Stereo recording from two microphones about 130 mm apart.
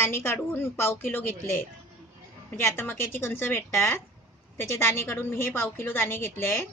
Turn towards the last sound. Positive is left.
turn(degrees=20)  # may be behind; listen again after turning